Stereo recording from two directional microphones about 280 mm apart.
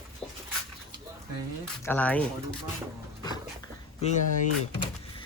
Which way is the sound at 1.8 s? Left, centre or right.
Centre.